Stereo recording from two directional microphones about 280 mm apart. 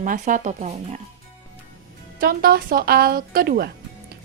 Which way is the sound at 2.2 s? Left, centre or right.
Right.